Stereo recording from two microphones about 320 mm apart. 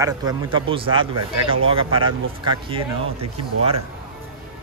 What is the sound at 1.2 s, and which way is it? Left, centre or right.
Speech, right.